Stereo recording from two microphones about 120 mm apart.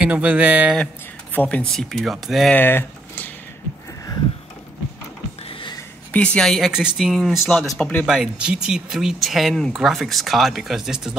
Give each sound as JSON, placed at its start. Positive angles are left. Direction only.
{"t": 0.0, "sound": "speech", "side_deg": -10}
{"t": 1.3, "sound": "speech", "side_deg": 15}
{"t": 2.5, "sound": "speech", "side_deg": 15}
{"t": 5.5, "sound": "a sound", "side_deg": 45}
{"t": 6.1, "sound": "speech", "side_deg": 10}
{"t": 7.8, "sound": "speech", "side_deg": 10}
{"t": 8.1, "sound": "speech", "side_deg": -5}